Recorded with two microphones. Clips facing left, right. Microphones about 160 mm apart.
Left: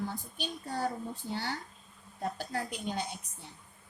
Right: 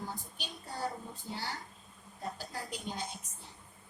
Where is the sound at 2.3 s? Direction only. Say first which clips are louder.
Left 5 dB; 60° left (ahead or behind).